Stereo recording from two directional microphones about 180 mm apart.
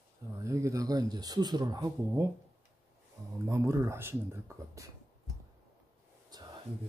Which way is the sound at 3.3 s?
15° right (ahead or behind).